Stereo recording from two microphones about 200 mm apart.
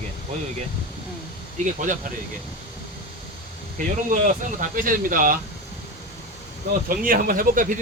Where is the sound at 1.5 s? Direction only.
40° right (ahead or behind).